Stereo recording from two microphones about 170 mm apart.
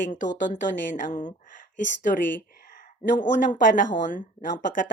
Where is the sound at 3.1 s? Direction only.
50° left (ahead or behind).